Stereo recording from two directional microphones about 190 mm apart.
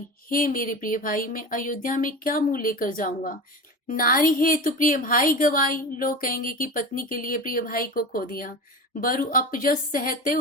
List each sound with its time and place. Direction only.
0.3 s a woman's voice: 50° left (ahead or behind)